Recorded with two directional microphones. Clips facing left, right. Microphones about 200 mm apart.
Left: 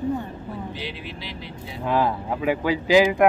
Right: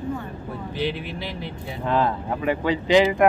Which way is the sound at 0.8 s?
55° right (ahead or behind).